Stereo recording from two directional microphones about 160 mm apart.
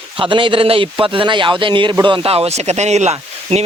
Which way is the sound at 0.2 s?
30° right (ahead or behind).